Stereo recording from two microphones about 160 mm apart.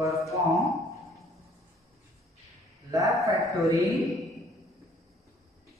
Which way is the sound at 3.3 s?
20° right (ahead or behind).